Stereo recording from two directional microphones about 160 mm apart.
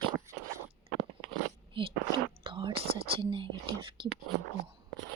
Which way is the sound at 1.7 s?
30° right (ahead or behind).